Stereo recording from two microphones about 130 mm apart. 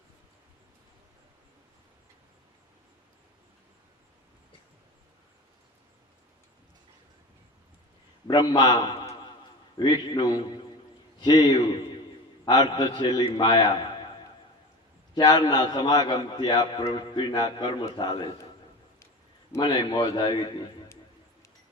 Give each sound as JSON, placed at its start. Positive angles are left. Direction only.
{"t": 8.3, "sound": "a man's voice", "side_deg": 30}
{"t": 15.1, "sound": "a man's voice", "side_deg": 30}
{"t": 19.6, "sound": "a man's voice", "side_deg": 35}